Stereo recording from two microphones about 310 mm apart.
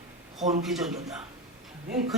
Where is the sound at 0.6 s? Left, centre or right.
Centre.